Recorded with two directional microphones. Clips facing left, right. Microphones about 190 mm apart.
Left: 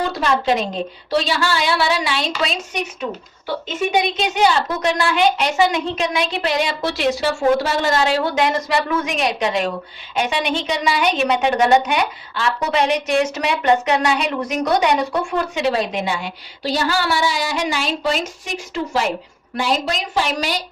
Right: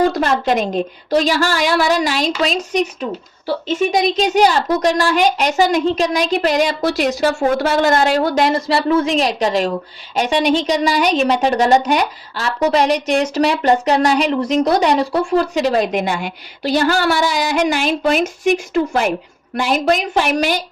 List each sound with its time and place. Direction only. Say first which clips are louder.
0.1 s speech: right 2 dB; 50° right (ahead or behind)